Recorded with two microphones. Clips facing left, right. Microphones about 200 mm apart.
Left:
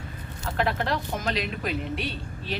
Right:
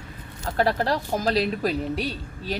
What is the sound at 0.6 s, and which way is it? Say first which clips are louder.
Speech: right 4 dB; 35° right (ahead or behind).